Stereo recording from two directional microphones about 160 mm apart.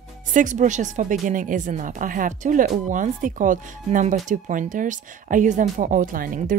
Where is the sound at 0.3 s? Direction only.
55° right (ahead or behind).